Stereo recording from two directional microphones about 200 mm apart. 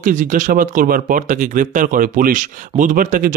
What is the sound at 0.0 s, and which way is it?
Speech, 40° right (ahead or behind).